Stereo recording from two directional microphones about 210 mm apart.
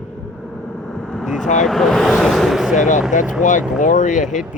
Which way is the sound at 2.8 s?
35° left (ahead or behind).